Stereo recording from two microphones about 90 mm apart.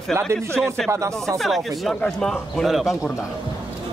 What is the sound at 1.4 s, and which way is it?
A man's voice, centre (ahead or behind).